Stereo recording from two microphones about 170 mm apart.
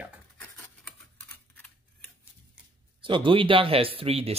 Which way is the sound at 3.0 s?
30° right (ahead or behind).